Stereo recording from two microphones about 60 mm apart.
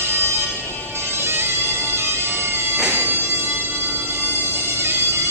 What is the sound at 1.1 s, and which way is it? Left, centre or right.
Bagpipes, right.